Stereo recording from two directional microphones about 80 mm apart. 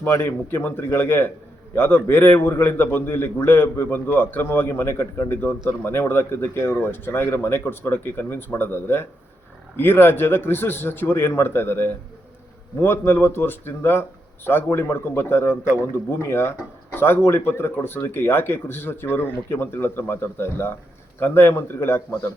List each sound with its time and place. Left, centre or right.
0.1 s speech: left